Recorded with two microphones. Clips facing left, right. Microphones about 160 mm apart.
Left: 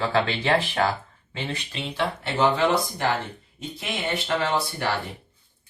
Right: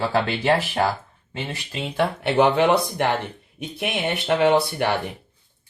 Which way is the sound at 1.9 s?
60° right (ahead or behind).